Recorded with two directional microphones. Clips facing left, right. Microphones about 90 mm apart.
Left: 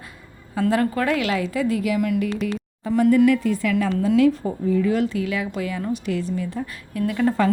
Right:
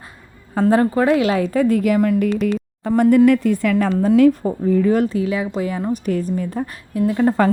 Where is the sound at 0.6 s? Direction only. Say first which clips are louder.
Right 5 dB; 30° right (ahead or behind).